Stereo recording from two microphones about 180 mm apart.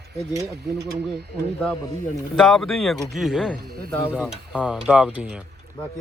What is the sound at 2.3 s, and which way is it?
Speech, centre (ahead or behind).